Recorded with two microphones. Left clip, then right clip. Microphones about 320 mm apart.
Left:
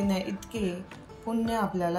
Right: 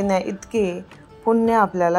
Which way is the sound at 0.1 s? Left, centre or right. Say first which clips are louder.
Right 11 dB; right.